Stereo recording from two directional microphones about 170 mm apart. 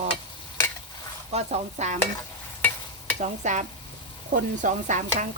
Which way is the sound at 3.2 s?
45° right (ahead or behind).